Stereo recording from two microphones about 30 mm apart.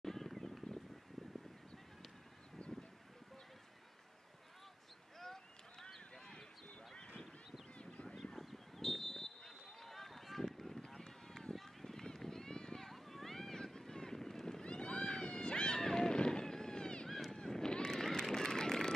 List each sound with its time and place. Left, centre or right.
0.0 s a sound: centre
5.2 s a sound: centre
7.8 s honk: left
8.4 s a sound: centre
10.9 s run: centre
11.5 s run: centre
12.9 s vehicle: centre
13.7 s boat: left
14.6 s run: left
15.0 s vehicle: left
15.8 s a sound: left
17.3 s run: centre
18.3 s vehicle: centre